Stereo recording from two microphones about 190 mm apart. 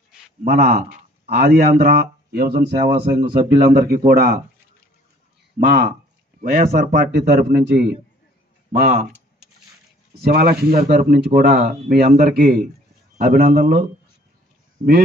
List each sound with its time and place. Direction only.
0.4 s a man's voice: 50° right (ahead or behind)
2.9 s a man's voice: 45° right (ahead or behind)
5.6 s a man's voice: 45° right (ahead or behind)
10.2 s a man's voice: 55° right (ahead or behind)